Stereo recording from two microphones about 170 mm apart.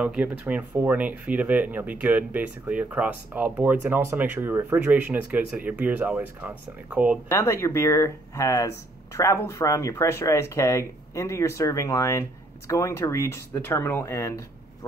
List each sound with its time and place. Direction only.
0.0 s speech: 5° right (ahead or behind)
7.2 s speech: 15° left (ahead or behind)